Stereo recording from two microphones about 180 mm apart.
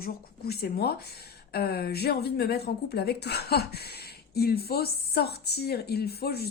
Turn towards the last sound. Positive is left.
turn(degrees=60)  # may be behind; listen again after turning